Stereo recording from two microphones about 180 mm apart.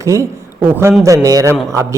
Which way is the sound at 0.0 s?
15° right (ahead or behind).